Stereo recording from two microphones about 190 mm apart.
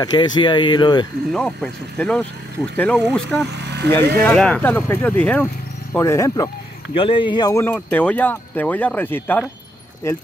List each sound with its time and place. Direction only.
0.0 s speech: 20° left (ahead or behind)
1.3 s speech: 5° left (ahead or behind)
3.4 s vehicle: 65° right (ahead or behind)
4.2 s speech: 5° left (ahead or behind)
7.0 s speech: 25° left (ahead or behind)